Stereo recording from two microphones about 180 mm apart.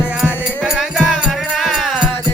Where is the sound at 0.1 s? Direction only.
5° right (ahead or behind).